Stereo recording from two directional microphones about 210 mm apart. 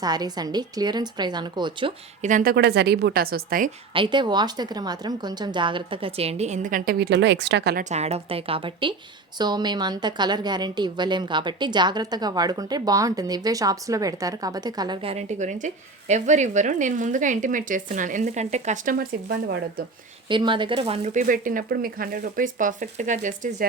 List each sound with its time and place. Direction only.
0.0 s a woman's voice: 20° right (ahead or behind)
2.2 s a woman's voice: 40° right (ahead or behind)
3.9 s a woman's voice: 25° right (ahead or behind); by 7.9 s 50° right (ahead or behind)
7.9 s a woman's voice: 30° right (ahead or behind)
20.2 s speech: 25° right (ahead or behind)